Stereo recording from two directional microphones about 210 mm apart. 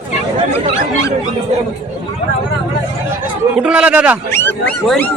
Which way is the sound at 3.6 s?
5° right (ahead or behind).